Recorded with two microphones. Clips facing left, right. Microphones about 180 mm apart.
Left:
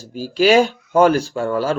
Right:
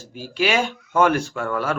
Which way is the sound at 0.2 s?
35° left (ahead or behind).